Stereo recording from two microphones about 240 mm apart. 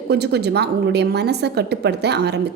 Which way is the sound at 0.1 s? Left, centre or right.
Right.